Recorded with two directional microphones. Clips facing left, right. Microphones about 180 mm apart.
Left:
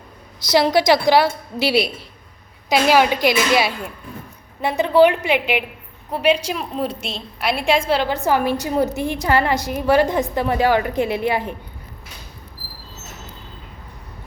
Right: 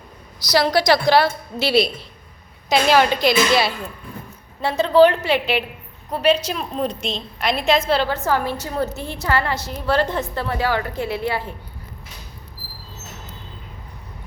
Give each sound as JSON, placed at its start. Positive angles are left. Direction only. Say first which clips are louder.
{"t": 0.4, "sound": "a woman's voice", "louder": "left 2 dB", "side_deg": 20}